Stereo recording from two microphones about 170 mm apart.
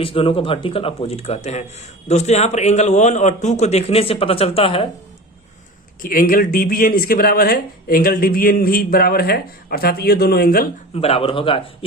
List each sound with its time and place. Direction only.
0.0 s a man's voice: 30° left (ahead or behind)
6.0 s speech: 55° left (ahead or behind)
10.9 s a man's voice: 35° left (ahead or behind)